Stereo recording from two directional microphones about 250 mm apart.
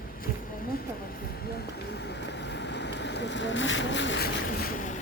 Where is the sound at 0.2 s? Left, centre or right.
Left.